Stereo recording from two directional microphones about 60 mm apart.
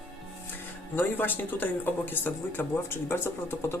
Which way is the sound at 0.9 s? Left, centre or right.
Left.